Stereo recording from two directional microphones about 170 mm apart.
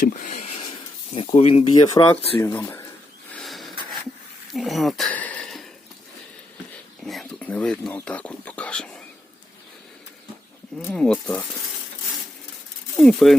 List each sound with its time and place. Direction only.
0.0 s a sound: 45° left (ahead or behind)
1.1 s speech: 35° left (ahead or behind)
1.7 s speech: 25° left (ahead or behind)
2.4 s speech: 15° left (ahead or behind)
3.3 s a sound: centre (ahead or behind)
7.0 s speech: centre (ahead or behind)
10.8 s speech: 5° left (ahead or behind)
13.0 s speech: centre (ahead or behind)